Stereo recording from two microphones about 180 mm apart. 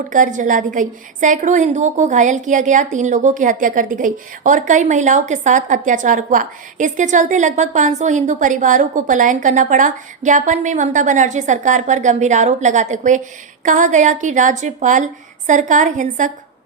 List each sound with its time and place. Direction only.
0.1 s a woman's voice: 45° right (ahead or behind)